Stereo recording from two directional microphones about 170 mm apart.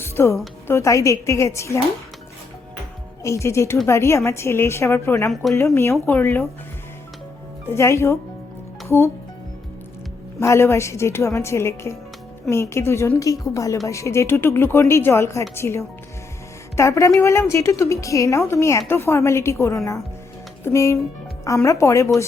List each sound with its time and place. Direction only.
0.0 s music: 15° left (ahead or behind)
0.7 s a woman's voice: 15° left (ahead or behind)
3.2 s a woman's voice: 15° left (ahead or behind)
5.3 s speech: centre (ahead or behind)
5.7 s a woman's voice: 15° left (ahead or behind)
7.7 s a woman's voice: 15° left (ahead or behind)
10.4 s a woman's voice: 15° left (ahead or behind)